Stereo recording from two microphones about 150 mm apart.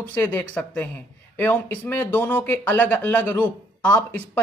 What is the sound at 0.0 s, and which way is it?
Speech, 10° left (ahead or behind).